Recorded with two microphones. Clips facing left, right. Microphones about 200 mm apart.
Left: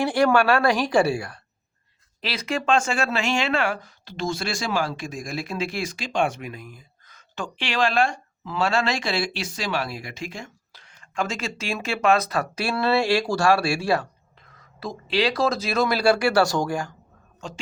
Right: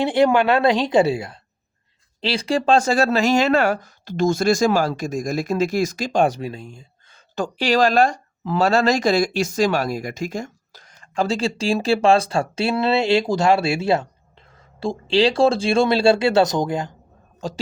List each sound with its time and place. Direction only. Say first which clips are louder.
0.0 s a woman's voice: right 3 dB; 20° right (ahead or behind)
17.4 s speech: right 8 dB; 35° right (ahead or behind)